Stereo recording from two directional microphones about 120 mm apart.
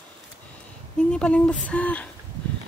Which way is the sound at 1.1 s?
10° left (ahead or behind).